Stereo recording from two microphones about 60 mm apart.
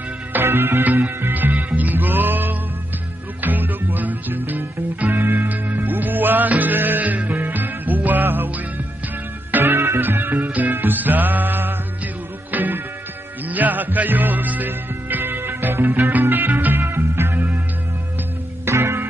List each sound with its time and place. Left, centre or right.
0.3 s music: right
18.7 s music: right